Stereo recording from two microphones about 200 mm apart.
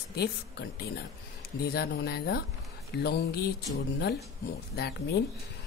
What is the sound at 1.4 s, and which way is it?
Speech, 50° left (ahead or behind).